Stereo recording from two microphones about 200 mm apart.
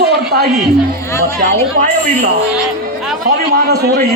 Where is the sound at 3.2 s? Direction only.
50° right (ahead or behind).